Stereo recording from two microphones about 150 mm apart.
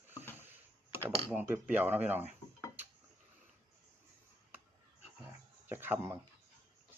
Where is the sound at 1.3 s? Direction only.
10° right (ahead or behind).